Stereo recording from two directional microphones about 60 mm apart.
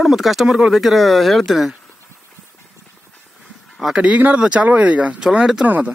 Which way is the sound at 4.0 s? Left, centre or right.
Right.